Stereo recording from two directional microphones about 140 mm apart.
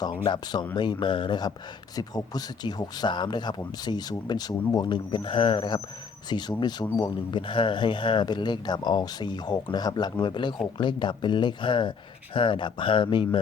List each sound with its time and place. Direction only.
0.3 s speech: 30° left (ahead or behind)